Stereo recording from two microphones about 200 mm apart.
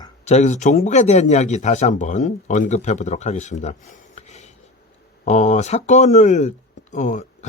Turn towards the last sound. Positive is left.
turn(degrees=40)  # may be behind; listen again after turning